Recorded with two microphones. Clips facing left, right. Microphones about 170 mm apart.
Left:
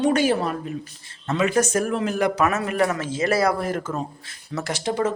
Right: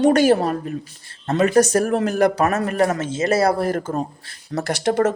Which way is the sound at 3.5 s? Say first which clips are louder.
Right 4 dB; 40° right (ahead or behind).